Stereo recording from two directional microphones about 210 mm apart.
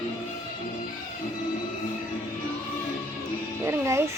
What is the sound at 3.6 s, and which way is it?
Music, 15° right (ahead or behind).